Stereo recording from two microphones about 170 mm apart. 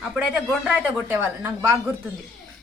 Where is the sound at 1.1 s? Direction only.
15° right (ahead or behind).